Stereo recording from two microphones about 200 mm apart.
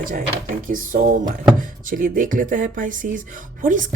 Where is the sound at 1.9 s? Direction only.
45° right (ahead or behind).